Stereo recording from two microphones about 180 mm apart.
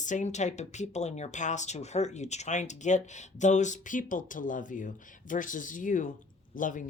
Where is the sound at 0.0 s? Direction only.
40° left (ahead or behind).